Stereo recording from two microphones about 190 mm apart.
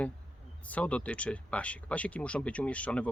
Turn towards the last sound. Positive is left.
turn(degrees=5)  # may be behind; listen again after turning